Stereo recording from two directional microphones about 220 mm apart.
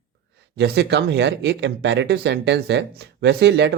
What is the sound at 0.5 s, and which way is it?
Speech, 50° right (ahead or behind).